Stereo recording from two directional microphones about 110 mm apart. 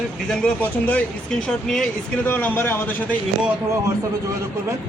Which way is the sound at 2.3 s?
15° left (ahead or behind).